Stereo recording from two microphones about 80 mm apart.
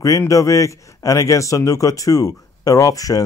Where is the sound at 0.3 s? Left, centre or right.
Left.